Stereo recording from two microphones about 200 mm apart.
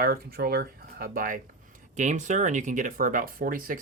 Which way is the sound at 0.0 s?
50° right (ahead or behind).